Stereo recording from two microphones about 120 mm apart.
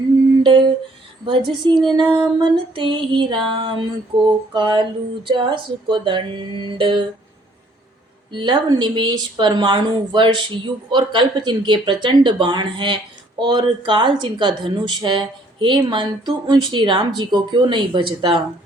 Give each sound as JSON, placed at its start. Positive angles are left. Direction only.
{"t": 1.2, "sound": "speech", "side_deg": -40}
{"t": 2.4, "sound": "female singing", "side_deg": -45}
{"t": 8.3, "sound": "speech", "side_deg": -40}